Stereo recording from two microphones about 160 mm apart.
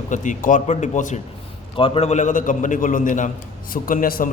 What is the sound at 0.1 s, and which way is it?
A man's voice, 50° left (ahead or behind).